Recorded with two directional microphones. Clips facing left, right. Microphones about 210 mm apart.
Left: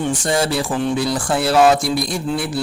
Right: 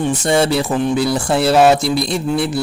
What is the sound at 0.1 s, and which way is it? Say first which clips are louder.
A man's voice: right 4 dB; 25° right (ahead or behind).